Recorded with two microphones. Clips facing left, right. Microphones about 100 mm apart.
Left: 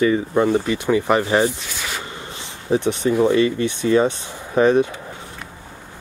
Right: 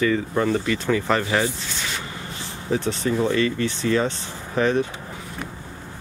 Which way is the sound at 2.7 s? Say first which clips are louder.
Left 5 dB; 20° left (ahead or behind).